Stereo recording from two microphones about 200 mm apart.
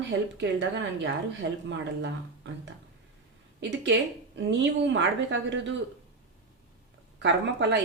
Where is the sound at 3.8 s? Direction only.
65° right (ahead or behind).